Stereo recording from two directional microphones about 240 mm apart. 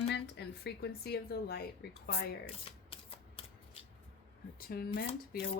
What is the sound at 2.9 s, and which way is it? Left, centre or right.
Shuffling cards, left.